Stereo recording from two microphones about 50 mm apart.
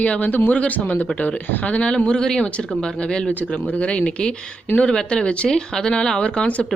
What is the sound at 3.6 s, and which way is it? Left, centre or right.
Speech, left.